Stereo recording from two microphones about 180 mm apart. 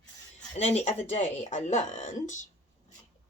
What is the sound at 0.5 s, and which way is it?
Speech, 35° left (ahead or behind).